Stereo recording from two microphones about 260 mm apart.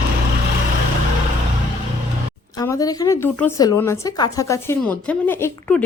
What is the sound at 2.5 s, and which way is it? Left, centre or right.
A woman's voice, centre.